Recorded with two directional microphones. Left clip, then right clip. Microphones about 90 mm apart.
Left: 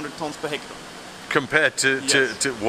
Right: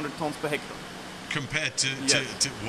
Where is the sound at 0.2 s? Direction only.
5° left (ahead or behind).